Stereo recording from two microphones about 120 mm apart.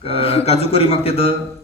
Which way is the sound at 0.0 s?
55° left (ahead or behind).